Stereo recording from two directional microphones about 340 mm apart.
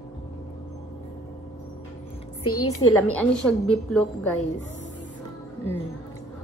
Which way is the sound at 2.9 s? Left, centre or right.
Centre.